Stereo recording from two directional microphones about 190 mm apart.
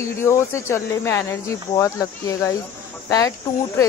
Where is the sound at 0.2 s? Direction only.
15° left (ahead or behind).